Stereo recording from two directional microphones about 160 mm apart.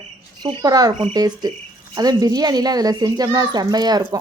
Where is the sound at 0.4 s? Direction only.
25° right (ahead or behind).